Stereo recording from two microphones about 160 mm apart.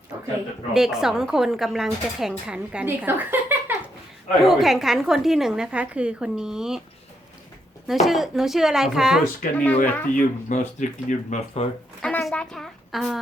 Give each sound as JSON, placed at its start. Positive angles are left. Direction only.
{"t": 0.7, "sound": "a woman's voice", "side_deg": -5}
{"t": 4.4, "sound": "a woman's voice", "side_deg": 0}
{"t": 8.0, "sound": "a woman's voice", "side_deg": 0}
{"t": 9.6, "sound": "speech", "side_deg": 10}
{"t": 10.2, "sound": "speech", "side_deg": 50}
{"t": 12.0, "sound": "a woman's voice", "side_deg": 5}